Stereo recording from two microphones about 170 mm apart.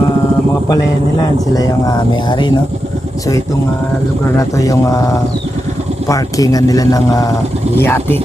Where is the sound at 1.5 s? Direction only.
20° left (ahead or behind).